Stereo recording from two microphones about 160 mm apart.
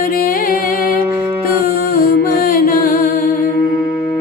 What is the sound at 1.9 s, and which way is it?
Music, 65° left (ahead or behind).